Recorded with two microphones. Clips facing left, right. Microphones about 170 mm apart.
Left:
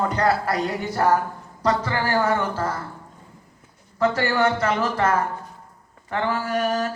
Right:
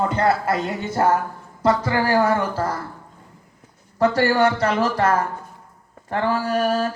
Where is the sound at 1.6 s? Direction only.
35° right (ahead or behind).